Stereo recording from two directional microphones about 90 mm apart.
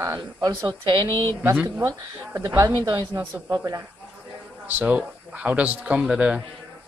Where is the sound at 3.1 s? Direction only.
50° right (ahead or behind).